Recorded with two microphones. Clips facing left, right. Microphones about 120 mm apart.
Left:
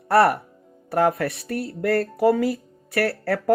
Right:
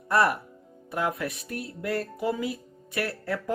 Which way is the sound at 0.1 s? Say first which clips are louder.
Left 6 dB; 70° left (ahead or behind).